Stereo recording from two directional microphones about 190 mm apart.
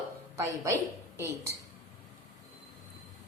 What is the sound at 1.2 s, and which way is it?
Speech, 15° right (ahead or behind).